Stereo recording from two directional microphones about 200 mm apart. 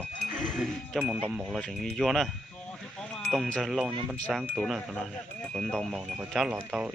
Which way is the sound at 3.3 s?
Centre (ahead or behind).